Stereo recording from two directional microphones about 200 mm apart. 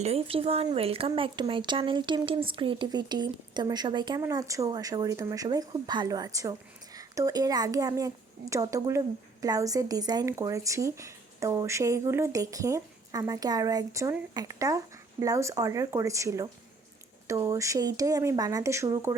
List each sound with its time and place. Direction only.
0.0 s speech: 30° right (ahead or behind); by 19.1 s 15° right (ahead or behind)